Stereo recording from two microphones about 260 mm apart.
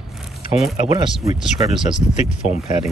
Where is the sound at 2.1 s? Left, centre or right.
Left.